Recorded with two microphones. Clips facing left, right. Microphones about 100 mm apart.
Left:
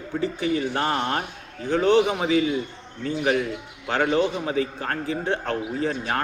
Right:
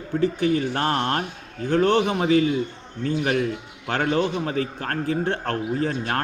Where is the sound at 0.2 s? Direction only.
55° right (ahead or behind).